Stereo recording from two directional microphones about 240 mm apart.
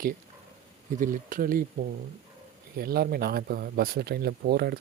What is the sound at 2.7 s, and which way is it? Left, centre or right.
Speech, right.